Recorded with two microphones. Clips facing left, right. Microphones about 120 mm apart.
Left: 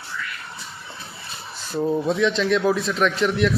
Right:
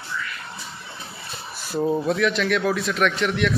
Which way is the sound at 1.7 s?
10° right (ahead or behind).